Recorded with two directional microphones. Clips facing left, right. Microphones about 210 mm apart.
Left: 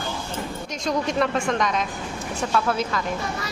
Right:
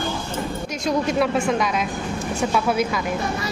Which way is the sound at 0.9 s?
5° right (ahead or behind).